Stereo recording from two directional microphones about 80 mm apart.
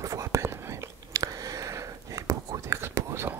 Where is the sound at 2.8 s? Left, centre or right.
Right.